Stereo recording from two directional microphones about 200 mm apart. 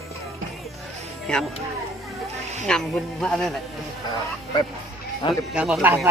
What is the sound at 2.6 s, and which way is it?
Speech, 5° left (ahead or behind).